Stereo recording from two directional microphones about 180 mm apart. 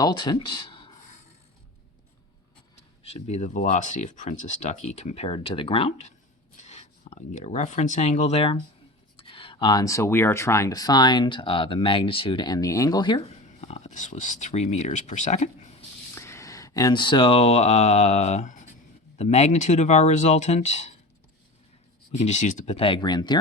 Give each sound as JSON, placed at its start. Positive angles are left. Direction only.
{"t": 0.0, "sound": "speech", "side_deg": 25}
{"t": 3.0, "sound": "speech", "side_deg": 35}
{"t": 13.6, "sound": "speech", "side_deg": 40}
{"t": 16.1, "sound": "speech", "side_deg": 15}
{"t": 22.1, "sound": "speech", "side_deg": 40}